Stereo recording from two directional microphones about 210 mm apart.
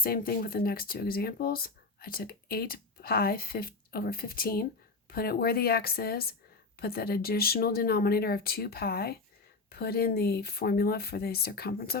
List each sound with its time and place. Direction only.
0.0 s speech: 45° left (ahead or behind)